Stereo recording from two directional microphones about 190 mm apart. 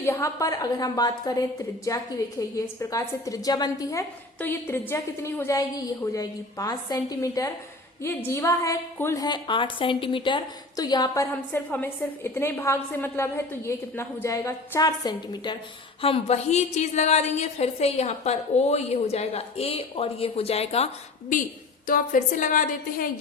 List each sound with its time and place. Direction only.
0.0 s a woman's voice: 15° left (ahead or behind); by 23.0 s 45° left (ahead or behind)